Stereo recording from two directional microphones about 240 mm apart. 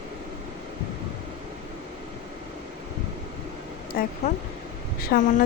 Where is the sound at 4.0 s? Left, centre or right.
Left.